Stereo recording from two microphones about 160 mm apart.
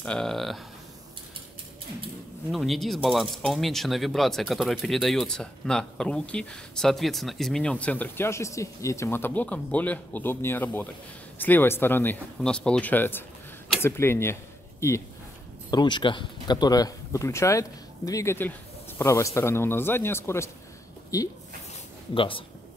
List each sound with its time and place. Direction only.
0.0 s speech: 5° left (ahead or behind)
2.5 s a man's voice: centre (ahead or behind); by 15.0 s 15° left (ahead or behind)
15.7 s a man's voice: 30° left (ahead or behind)
22.1 s speech: 35° left (ahead or behind)